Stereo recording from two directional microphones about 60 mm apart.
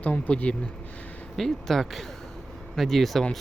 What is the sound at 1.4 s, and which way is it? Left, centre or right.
Speech, centre.